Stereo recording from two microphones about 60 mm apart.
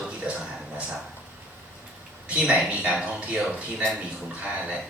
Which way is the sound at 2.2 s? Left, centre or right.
Right.